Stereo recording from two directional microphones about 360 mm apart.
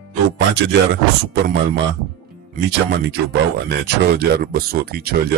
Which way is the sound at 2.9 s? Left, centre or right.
Right.